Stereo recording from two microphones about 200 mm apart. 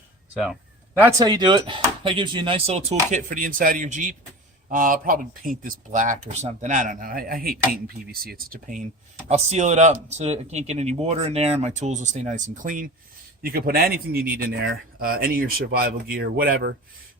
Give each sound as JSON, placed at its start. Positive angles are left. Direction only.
{"t": 1.2, "sound": "speech", "side_deg": -20}